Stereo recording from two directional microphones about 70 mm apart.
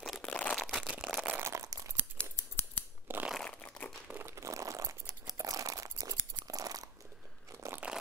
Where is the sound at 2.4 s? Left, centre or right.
Left.